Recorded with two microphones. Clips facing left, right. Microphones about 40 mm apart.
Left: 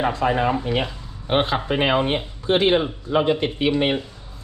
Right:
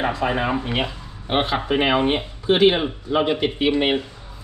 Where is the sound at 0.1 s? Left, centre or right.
Right.